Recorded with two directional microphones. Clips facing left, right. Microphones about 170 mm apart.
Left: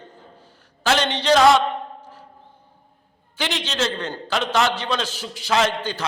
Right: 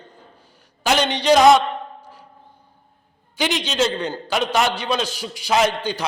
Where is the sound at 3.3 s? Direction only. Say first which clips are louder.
Right 4 dB; 15° right (ahead or behind).